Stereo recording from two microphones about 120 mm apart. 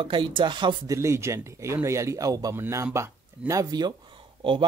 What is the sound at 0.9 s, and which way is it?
Speech, 25° right (ahead or behind).